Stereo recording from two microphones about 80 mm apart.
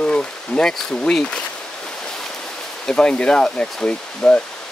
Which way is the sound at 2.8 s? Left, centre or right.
Centre.